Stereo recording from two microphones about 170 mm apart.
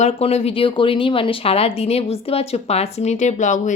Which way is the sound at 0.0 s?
35° left (ahead or behind).